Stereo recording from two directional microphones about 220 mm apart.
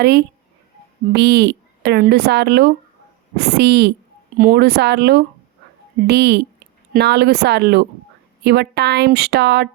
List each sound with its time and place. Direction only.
0.0 s speech: 50° right (ahead or behind)